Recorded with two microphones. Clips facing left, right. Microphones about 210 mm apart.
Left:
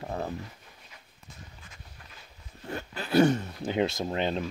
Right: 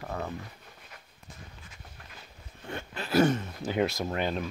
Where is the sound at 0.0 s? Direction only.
30° left (ahead or behind).